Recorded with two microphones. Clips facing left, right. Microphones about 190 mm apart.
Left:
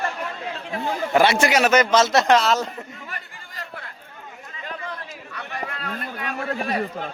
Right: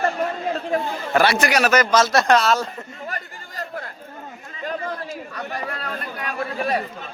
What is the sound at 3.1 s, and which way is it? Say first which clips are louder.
Chatter: right 6 dB; 40° right (ahead or behind).